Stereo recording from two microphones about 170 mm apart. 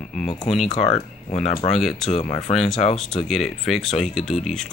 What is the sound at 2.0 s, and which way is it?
Speech, 40° left (ahead or behind).